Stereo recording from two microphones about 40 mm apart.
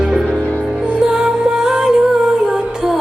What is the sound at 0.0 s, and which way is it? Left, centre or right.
Music, centre.